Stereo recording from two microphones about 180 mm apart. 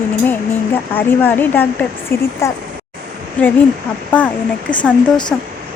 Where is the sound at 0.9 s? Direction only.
10° left (ahead or behind).